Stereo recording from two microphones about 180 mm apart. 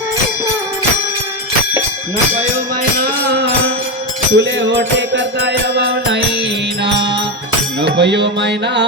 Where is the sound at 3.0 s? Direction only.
65° right (ahead or behind).